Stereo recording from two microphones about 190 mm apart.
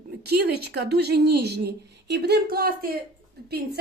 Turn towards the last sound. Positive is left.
turn(degrees=-60)  # may be behind; listen again after turning